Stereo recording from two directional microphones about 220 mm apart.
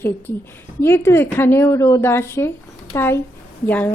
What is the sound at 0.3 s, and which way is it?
A woman's voice, 10° left (ahead or behind).